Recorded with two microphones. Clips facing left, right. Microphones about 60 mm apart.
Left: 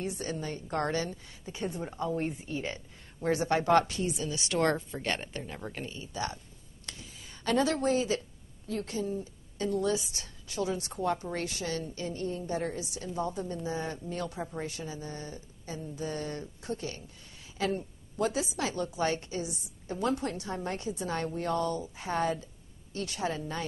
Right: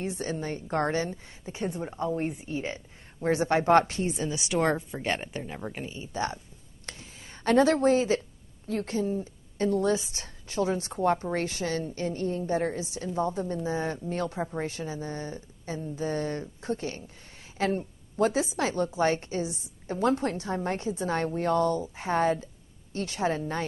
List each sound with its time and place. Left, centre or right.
0.0 s speech: right
4.3 s speech: centre
6.1 s speech: right
6.9 s a sound: right
8.6 s speech: right
14.0 s speech: right